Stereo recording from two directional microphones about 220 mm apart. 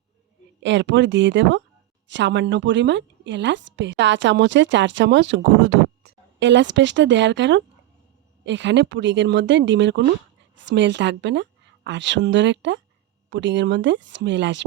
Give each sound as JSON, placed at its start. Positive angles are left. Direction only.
{"t": 0.6, "sound": "a woman's voice", "side_deg": -55}